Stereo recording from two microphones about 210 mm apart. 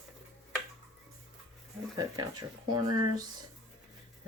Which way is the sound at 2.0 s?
20° right (ahead or behind).